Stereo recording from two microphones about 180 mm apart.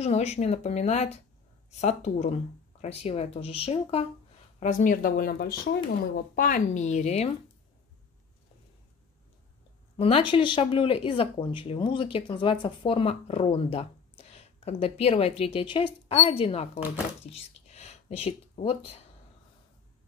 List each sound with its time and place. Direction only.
0.0 s speech: 35° left (ahead or behind)
4.6 s speech: 45° left (ahead or behind)
9.9 s speech: 30° left (ahead or behind)